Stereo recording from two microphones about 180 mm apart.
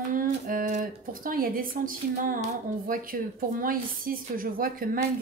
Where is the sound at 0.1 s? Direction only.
50° right (ahead or behind).